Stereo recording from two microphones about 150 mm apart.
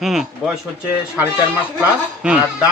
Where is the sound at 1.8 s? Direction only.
10° right (ahead or behind).